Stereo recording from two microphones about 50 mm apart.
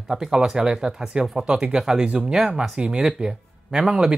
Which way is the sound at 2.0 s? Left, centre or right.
Right.